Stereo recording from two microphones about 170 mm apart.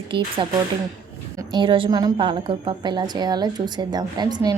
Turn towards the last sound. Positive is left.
turn(degrees=-25)  # may be behind; listen again after turning